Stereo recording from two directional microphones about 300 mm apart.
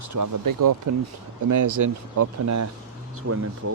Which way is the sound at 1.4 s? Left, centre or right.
Right.